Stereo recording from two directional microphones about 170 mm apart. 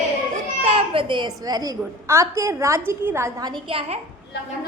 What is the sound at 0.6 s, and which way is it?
A woman's voice, 30° right (ahead or behind).